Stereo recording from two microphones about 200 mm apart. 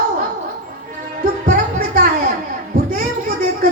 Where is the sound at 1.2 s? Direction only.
45° right (ahead or behind).